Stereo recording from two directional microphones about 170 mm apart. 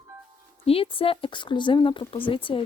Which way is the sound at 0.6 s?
35° left (ahead or behind).